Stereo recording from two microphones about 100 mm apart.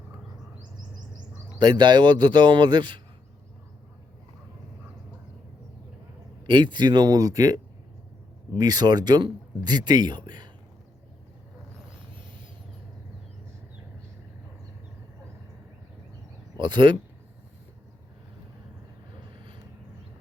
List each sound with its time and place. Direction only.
0.6 s chirp: 45° right (ahead or behind)
1.5 s speech: 45° right (ahead or behind)
6.4 s speech: 50° right (ahead or behind)
16.6 s speech: 50° right (ahead or behind)